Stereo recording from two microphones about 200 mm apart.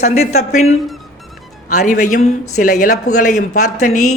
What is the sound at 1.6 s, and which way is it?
Speech, 40° left (ahead or behind).